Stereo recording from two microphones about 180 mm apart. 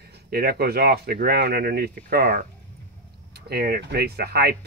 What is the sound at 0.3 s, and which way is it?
Speech, 60° right (ahead or behind).